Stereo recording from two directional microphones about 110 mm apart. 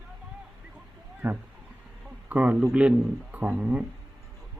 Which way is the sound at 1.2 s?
20° right (ahead or behind).